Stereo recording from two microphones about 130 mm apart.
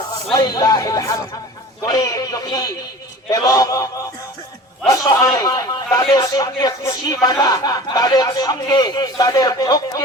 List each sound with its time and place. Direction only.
0.3 s a man's voice: 30° left (ahead or behind)